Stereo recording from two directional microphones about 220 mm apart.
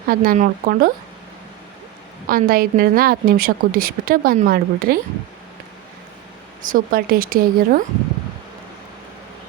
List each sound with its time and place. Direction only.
0.1 s a woman's voice: 40° right (ahead or behind)
2.2 s a woman's voice: 40° right (ahead or behind)
6.6 s a woman's voice: 40° right (ahead or behind)